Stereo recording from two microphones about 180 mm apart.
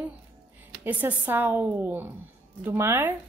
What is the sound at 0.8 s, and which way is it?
Speech, 10° right (ahead or behind).